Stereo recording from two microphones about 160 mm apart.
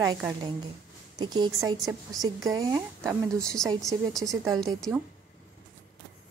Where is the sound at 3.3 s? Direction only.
5° left (ahead or behind).